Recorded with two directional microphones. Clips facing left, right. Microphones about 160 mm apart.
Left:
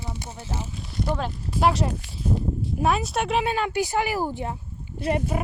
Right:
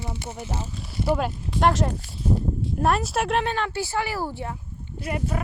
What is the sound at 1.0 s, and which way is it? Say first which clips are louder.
Speech: right 3 dB; 10° right (ahead or behind).